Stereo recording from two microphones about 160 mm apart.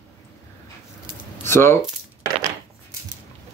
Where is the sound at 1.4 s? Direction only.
15° left (ahead or behind).